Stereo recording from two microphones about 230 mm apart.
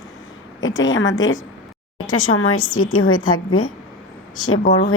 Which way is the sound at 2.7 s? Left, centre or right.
Centre.